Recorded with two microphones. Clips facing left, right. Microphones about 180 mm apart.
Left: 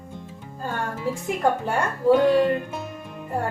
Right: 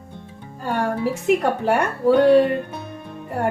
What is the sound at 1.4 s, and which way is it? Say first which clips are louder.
A woman's voice: right 3 dB; 70° right (ahead or behind).